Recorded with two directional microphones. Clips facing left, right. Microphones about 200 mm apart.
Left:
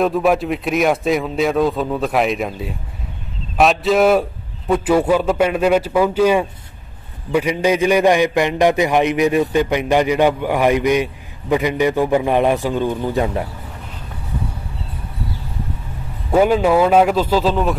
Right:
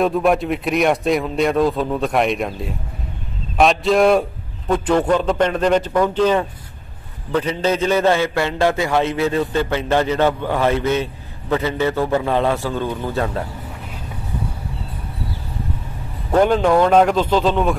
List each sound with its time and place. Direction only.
0.0 s a man's voice: centre (ahead or behind)
16.3 s a man's voice: 5° left (ahead or behind)